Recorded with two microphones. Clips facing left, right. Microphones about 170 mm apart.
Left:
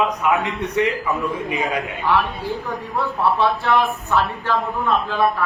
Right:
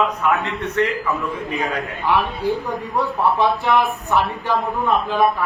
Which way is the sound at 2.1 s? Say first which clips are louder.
Right 2 dB; 15° right (ahead or behind).